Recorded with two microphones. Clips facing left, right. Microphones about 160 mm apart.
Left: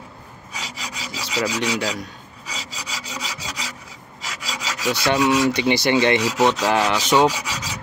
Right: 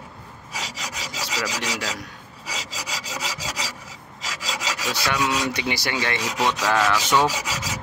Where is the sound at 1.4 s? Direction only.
30° left (ahead or behind).